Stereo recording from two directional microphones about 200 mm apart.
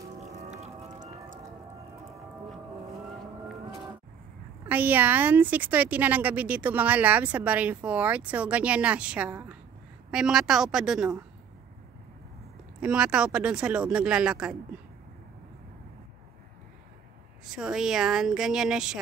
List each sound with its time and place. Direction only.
0.2 s music: 35° right (ahead or behind)
4.6 s a woman's voice: 10° right (ahead or behind)
12.8 s speech: 5° right (ahead or behind)
17.6 s speech: 5° right (ahead or behind)